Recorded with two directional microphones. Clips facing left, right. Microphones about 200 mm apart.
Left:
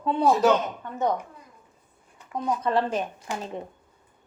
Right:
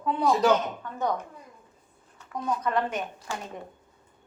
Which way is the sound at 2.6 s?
30° left (ahead or behind).